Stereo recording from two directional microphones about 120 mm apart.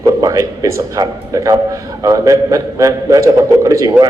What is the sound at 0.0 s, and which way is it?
A man's voice, 30° right (ahead or behind).